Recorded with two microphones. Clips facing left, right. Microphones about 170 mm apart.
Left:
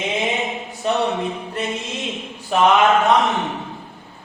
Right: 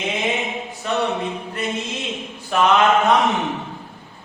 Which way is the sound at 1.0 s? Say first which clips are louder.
Left 1 dB; centre (ahead or behind).